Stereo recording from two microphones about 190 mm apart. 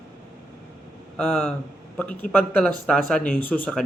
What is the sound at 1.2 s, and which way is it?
Speech, 5° left (ahead or behind).